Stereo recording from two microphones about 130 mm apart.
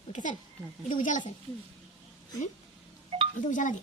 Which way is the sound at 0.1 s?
75° left (ahead or behind).